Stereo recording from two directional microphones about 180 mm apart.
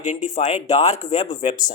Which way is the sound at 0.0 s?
40° left (ahead or behind).